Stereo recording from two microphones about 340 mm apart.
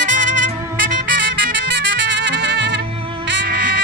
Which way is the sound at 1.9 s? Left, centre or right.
Right.